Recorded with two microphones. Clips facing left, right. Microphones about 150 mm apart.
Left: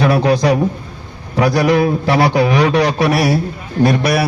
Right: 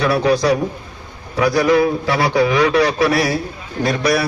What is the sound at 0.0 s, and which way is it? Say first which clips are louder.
Speech: left 2 dB; 55° left (ahead or behind).